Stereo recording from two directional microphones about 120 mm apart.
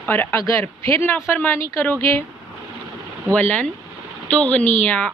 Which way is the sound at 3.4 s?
15° left (ahead or behind).